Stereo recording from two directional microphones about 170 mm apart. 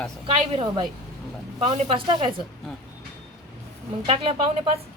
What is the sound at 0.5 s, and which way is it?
Speech, 30° right (ahead or behind).